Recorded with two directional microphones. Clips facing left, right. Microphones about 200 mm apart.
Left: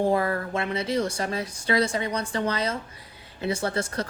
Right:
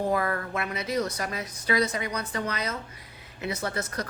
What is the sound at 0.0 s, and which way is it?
Speech, 30° left (ahead or behind).